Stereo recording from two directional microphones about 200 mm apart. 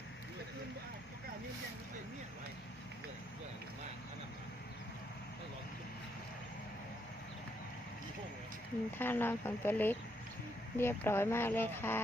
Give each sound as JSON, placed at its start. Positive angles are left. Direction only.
{"t": 9.0, "sound": "speech", "side_deg": 10}